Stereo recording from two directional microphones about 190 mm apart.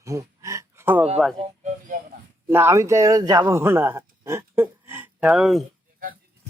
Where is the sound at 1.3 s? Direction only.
40° right (ahead or behind).